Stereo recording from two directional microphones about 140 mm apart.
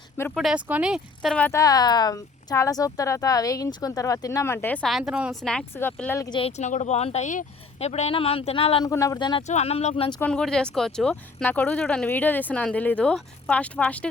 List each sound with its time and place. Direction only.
0.3 s speech: 5° right (ahead or behind)
1.4 s speech: 15° left (ahead or behind)
1.6 s speech: 30° left (ahead or behind)
4.9 s speech: centre (ahead or behind)
5.7 s speech: 15° left (ahead or behind)
6.4 s speech: 55° left (ahead or behind)
8.8 s speech: 25° left (ahead or behind)
9.5 s speech: 50° left (ahead or behind)
10.2 s speech: 5° left (ahead or behind)